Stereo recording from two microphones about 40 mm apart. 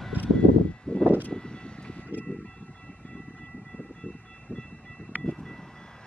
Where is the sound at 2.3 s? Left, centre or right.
Left.